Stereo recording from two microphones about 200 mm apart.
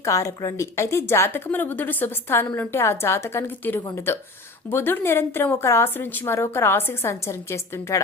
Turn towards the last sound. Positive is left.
turn(degrees=15)  # may be behind; listen again after turning